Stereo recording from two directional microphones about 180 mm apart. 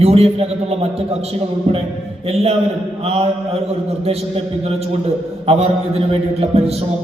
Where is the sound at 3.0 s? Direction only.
35° right (ahead or behind).